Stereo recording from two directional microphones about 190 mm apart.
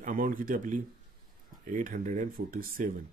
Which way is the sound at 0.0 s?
45° right (ahead or behind).